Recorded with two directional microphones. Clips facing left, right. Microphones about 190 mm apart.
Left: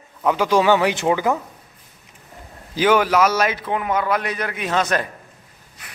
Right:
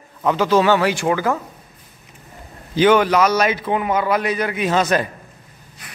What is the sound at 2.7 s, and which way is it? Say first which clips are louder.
A man's voice: right 3 dB; 5° left (ahead or behind).